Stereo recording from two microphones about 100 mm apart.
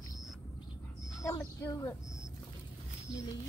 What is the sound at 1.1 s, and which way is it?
Speech, 35° left (ahead or behind).